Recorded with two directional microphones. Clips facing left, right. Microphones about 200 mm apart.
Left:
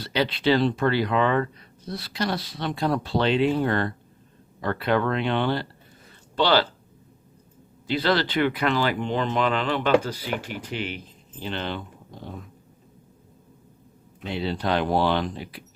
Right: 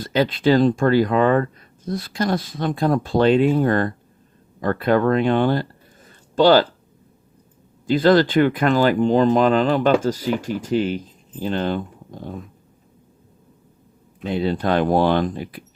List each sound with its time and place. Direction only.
0.0 s speech: 45° right (ahead or behind)
6.1 s a sound: 45° right (ahead or behind)
7.9 s speech: 45° right (ahead or behind)
14.3 s speech: 50° right (ahead or behind)